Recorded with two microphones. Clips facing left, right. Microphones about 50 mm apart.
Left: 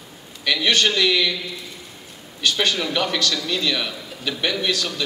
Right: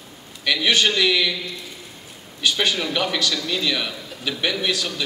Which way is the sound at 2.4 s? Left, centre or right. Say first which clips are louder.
Even; centre.